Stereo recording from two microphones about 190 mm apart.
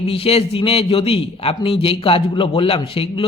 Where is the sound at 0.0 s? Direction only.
30° left (ahead or behind).